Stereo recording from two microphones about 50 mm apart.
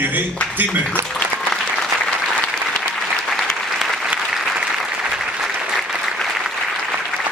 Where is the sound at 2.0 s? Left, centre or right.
Centre.